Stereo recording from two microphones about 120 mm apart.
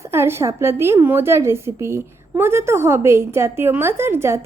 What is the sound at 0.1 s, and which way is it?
A woman's voice, 20° right (ahead or behind).